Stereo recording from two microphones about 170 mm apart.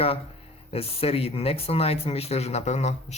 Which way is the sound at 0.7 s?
35° left (ahead or behind).